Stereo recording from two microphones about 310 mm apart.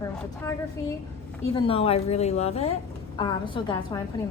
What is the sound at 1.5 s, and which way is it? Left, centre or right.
A woman's voice, centre.